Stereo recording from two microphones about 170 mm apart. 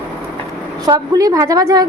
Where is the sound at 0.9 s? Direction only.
20° right (ahead or behind).